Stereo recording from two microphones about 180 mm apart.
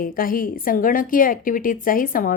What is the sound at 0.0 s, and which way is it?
Speech, 50° left (ahead or behind).